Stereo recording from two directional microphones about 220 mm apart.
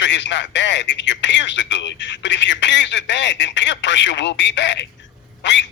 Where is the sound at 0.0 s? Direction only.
55° left (ahead or behind).